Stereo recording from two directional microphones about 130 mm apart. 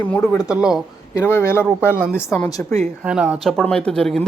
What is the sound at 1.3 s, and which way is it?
A woman's voice, 20° left (ahead or behind).